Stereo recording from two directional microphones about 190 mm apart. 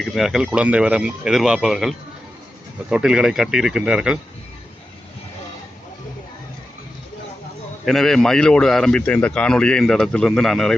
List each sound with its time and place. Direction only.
0.0 s a man's voice: centre (ahead or behind)
7.9 s a man's voice: centre (ahead or behind)